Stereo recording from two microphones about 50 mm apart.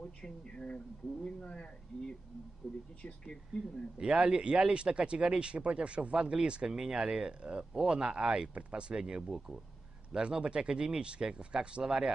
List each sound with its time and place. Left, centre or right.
0.2 s speech: centre
2.6 s speech: centre
4.0 s speech: centre